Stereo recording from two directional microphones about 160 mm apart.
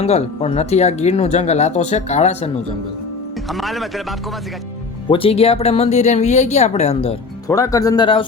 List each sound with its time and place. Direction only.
0.0 s speech: 40° left (ahead or behind)
3.6 s speech: centre (ahead or behind)
5.0 s a woman's voice: 35° left (ahead or behind)
7.4 s speech: 20° left (ahead or behind)